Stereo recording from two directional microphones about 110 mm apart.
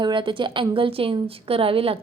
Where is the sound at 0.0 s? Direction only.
45° right (ahead or behind).